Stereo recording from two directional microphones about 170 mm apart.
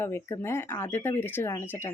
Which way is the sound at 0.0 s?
15° left (ahead or behind).